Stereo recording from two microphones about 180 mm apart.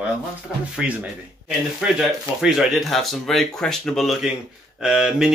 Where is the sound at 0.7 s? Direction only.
5° right (ahead or behind).